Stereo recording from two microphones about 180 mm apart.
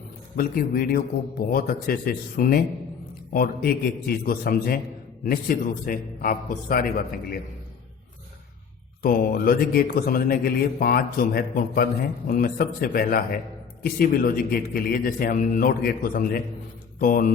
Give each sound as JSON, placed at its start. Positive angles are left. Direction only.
{"t": 0.3, "sound": "a man's voice", "side_deg": 55}
{"t": 9.0, "sound": "speech", "side_deg": 55}